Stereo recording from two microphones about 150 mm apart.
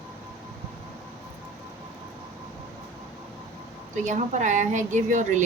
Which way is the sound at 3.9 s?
55° right (ahead or behind).